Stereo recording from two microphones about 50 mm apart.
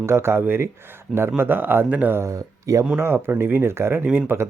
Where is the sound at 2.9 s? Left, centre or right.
Right.